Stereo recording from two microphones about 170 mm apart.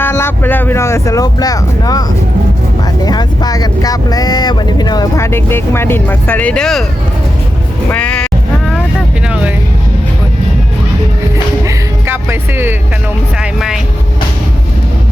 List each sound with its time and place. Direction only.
0.0 s speech: 15° left (ahead or behind)
7.9 s speech: 5° left (ahead or behind)
8.7 s vehicle: centre (ahead or behind)
11.6 s music: 15° right (ahead or behind)
13.4 s speech: 5° right (ahead or behind)